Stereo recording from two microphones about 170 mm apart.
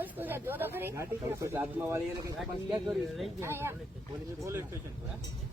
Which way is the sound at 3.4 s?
15° right (ahead or behind).